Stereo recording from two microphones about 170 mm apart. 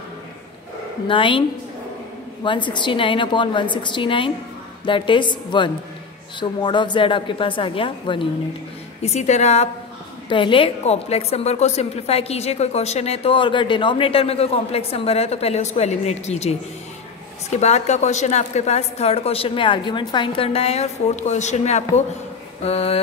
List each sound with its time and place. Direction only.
1.0 s a woman's voice: 30° left (ahead or behind)
2.4 s a woman's voice: 30° left (ahead or behind)
9.0 s a woman's voice: 40° left (ahead or behind)
10.3 s a woman's voice: 30° left (ahead or behind)